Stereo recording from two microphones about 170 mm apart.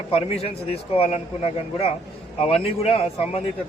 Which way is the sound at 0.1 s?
35° left (ahead or behind).